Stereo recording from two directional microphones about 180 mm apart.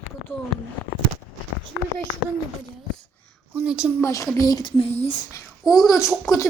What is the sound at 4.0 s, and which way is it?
Speech, 15° left (ahead or behind).